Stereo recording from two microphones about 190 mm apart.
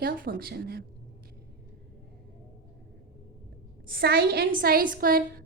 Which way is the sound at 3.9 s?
50° right (ahead or behind).